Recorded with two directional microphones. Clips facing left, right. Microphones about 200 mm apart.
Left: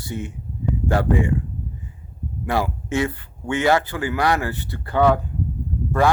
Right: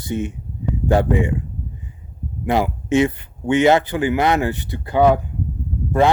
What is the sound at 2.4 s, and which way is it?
Speech, 20° right (ahead or behind).